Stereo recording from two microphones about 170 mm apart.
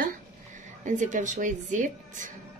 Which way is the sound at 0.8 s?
45° right (ahead or behind).